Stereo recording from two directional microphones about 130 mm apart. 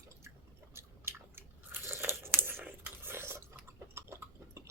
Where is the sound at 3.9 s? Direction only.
20° right (ahead or behind).